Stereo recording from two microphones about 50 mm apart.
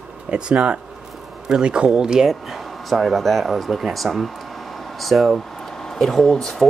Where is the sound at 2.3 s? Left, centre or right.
Centre.